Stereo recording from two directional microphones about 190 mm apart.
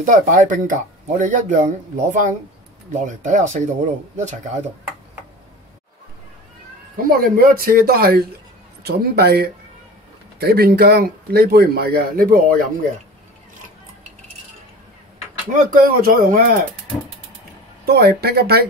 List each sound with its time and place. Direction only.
0.0 s speech: 40° right (ahead or behind)
7.0 s speech: 50° right (ahead or behind)
15.5 s speech: 45° right (ahead or behind)
17.8 s speech: 55° right (ahead or behind)